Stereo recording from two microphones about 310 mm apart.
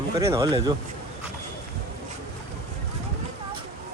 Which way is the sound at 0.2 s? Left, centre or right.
Centre.